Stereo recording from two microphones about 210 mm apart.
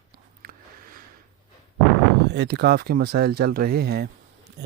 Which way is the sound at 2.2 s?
55° right (ahead or behind).